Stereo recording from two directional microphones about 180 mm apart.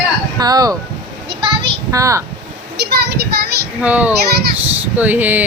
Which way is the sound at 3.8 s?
10° right (ahead or behind).